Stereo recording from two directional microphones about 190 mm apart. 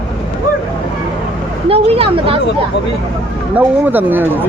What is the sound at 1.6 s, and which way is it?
Speech, 30° right (ahead or behind).